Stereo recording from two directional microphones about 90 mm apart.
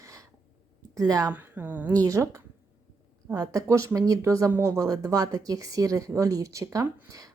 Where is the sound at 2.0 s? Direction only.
35° right (ahead or behind).